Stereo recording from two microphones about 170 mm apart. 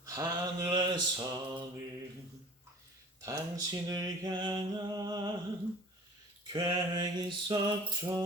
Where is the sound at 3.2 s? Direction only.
20° right (ahead or behind).